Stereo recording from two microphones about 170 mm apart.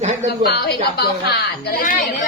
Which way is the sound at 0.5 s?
70° left (ahead or behind).